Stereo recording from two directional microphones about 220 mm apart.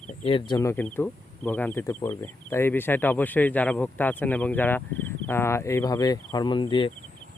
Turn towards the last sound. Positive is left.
turn(degrees=20)  # may be behind; listen again after turning